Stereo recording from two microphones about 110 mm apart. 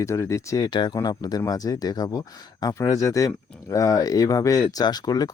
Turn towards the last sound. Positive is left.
turn(degrees=35)  # may be behind; listen again after turning